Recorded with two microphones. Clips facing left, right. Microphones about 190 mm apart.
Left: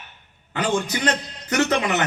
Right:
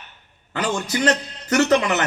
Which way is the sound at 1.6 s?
40° right (ahead or behind).